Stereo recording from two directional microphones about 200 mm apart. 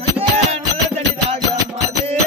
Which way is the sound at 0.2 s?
30° right (ahead or behind).